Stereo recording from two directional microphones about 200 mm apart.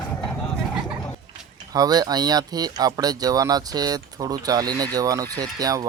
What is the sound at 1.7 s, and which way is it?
Speech, 20° right (ahead or behind).